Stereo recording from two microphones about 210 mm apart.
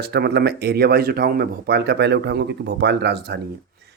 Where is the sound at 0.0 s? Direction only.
50° right (ahead or behind).